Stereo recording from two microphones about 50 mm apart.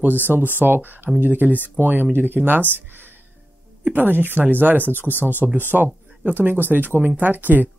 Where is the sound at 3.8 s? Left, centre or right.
Right.